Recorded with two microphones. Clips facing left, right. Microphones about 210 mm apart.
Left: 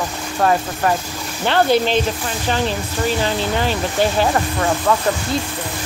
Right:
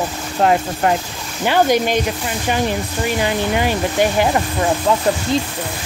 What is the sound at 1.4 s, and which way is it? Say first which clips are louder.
Speech: right 1 dB; 10° right (ahead or behind).